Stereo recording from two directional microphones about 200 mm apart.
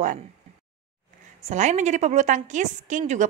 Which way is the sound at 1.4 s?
35° right (ahead or behind).